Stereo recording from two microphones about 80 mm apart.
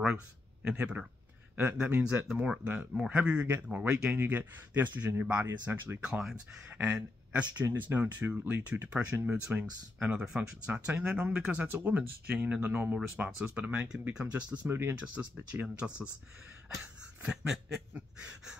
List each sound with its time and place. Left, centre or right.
0.0 s speech: centre
1.6 s speech: right
2.2 s speech: centre
2.9 s speech: centre; by 5.9 s right
6.0 s speech: centre
9.9 s speech: centre
10.7 s speech: right
14.7 s speech: right
15.0 s speech: centre
17.5 s speech: centre